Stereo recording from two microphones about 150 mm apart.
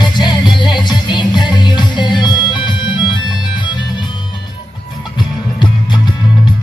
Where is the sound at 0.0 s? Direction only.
30° left (ahead or behind).